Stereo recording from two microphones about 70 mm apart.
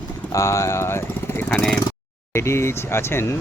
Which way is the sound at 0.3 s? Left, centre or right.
Left.